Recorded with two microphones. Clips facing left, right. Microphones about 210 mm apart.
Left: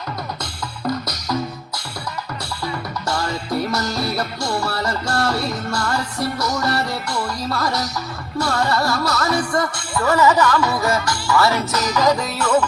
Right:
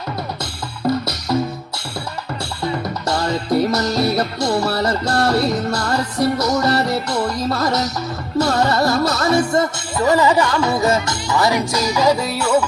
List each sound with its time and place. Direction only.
0.9 s music: 30° right (ahead or behind)
3.7 s music: 20° right (ahead or behind)